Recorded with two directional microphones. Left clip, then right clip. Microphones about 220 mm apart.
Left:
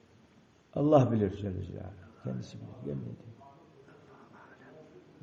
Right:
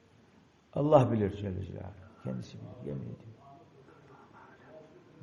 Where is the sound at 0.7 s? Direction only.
40° right (ahead or behind).